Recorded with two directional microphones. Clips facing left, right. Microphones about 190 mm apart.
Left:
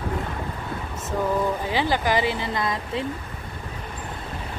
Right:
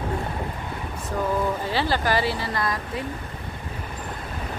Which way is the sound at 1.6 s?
15° left (ahead or behind).